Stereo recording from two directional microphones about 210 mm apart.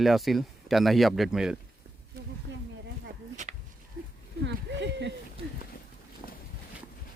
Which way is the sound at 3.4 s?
35° right (ahead or behind).